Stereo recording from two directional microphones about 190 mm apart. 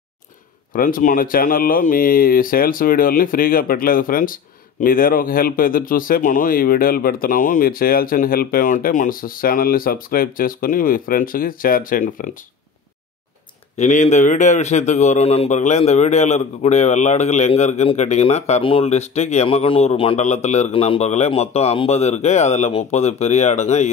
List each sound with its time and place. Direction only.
0.7 s speech: 45° left (ahead or behind)
13.7 s a man's voice: 40° left (ahead or behind)